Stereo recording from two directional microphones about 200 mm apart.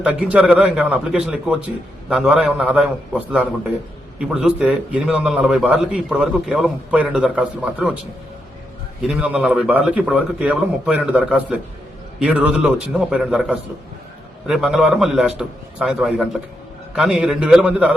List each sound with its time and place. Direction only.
0.0 s a man's voice: 5° right (ahead or behind)
9.0 s a man's voice: 5° right (ahead or behind)